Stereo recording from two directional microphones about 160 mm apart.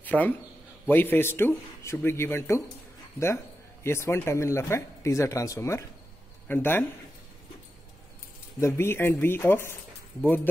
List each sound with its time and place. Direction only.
0.0 s a man's voice: 10° left (ahead or behind)
3.8 s speech: 15° left (ahead or behind)
8.5 s speech: 15° left (ahead or behind)